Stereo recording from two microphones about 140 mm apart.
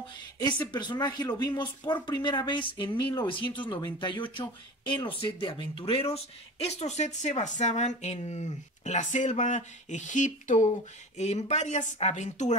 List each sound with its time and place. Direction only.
0.4 s speech: 35° left (ahead or behind); by 12.5 s 55° left (ahead or behind)